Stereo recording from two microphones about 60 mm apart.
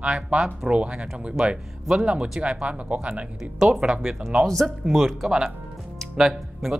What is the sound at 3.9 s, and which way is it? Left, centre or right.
Speech, centre.